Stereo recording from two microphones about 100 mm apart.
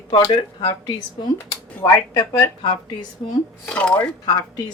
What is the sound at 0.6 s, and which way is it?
Speech, 45° left (ahead or behind).